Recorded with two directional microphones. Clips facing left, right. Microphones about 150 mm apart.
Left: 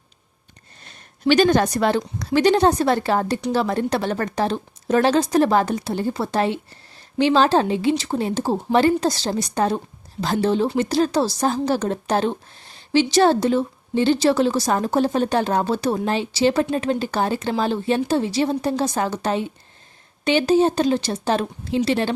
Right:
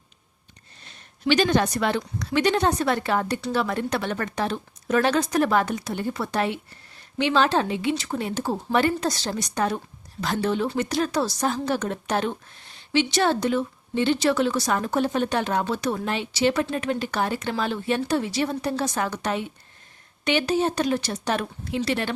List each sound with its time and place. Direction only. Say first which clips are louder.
1.3 s speech: left 4 dB; 45° left (ahead or behind)